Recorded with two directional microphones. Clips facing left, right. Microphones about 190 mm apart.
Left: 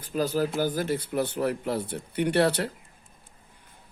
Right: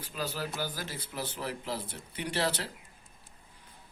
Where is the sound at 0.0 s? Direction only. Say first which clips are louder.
Left 10 dB; 45° left (ahead or behind).